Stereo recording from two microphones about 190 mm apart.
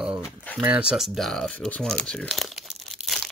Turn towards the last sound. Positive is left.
turn(degrees=0)  # may be behind; listen again after turning